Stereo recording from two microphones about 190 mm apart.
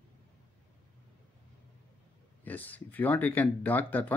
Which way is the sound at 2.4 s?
10° left (ahead or behind).